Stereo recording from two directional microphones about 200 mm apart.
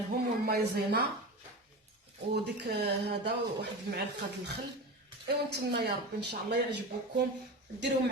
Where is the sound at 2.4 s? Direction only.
55° right (ahead or behind).